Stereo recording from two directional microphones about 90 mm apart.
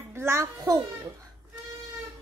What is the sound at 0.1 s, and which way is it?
Speech, 30° right (ahead or behind).